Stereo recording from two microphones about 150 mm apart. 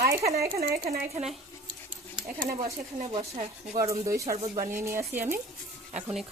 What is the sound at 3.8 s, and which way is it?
Speech, 20° right (ahead or behind).